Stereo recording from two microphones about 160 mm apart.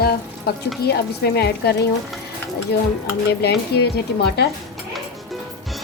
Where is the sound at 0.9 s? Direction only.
90° left.